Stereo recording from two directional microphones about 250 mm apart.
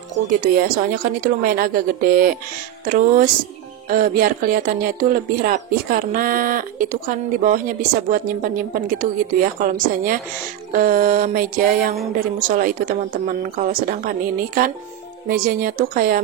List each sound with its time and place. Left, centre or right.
0.4 s speech: right